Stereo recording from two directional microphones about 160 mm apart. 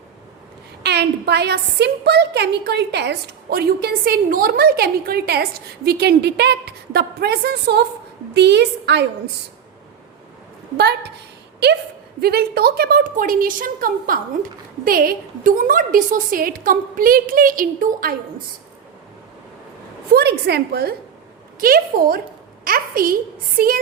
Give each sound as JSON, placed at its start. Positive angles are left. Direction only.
{"t": 0.8, "sound": "a woman's voice", "side_deg": -90}
{"t": 12.2, "sound": "a woman's voice", "side_deg": -75}
{"t": 20.1, "sound": "a woman's voice", "side_deg": -90}
{"t": 21.6, "sound": "a woman's voice", "side_deg": -65}